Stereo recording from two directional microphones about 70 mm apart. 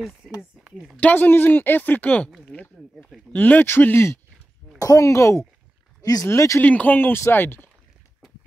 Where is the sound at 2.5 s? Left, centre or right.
Centre.